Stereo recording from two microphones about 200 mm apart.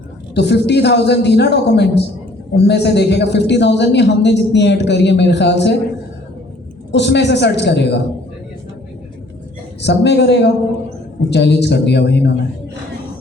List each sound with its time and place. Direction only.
0.3 s a man's voice: 55° left (ahead or behind)
6.9 s a man's voice: 60° left (ahead or behind)
9.8 s a man's voice: 60° left (ahead or behind)